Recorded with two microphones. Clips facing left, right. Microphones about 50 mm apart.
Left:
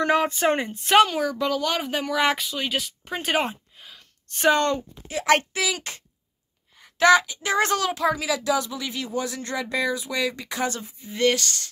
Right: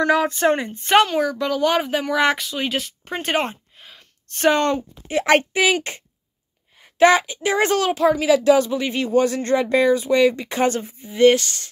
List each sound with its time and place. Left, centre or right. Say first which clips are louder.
0.0 s speech: right 3 dB; centre
1.6 s speech: right 6 dB; centre
4.6 s a woman's voice: right 3 dB; right
5.1 s speech: right 4 dB; right
8.1 s speech: right 8 dB; right
11.1 s speech: right 8 dB; right